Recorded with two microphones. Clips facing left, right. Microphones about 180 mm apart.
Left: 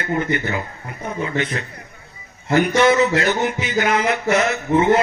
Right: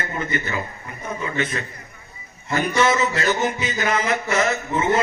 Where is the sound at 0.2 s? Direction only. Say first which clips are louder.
Left 4 dB; 65° left (ahead or behind).